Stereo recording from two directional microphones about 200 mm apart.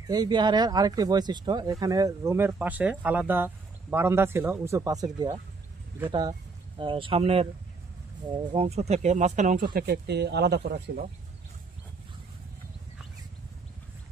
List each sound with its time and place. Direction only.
0.0 s speech: 20° right (ahead or behind)
6.8 s speech: 25° right (ahead or behind); by 11.1 s 50° right (ahead or behind)